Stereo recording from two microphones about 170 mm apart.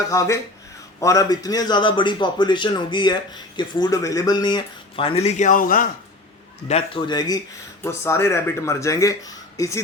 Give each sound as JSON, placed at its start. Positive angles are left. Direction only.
{"t": 0.1, "sound": "a man's voice", "side_deg": 20}
{"t": 6.7, "sound": "a man's voice", "side_deg": 35}